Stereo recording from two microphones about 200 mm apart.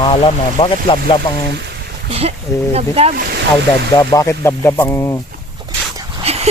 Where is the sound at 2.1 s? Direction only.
30° right (ahead or behind).